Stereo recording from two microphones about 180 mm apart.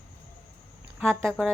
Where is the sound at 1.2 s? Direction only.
5° left (ahead or behind).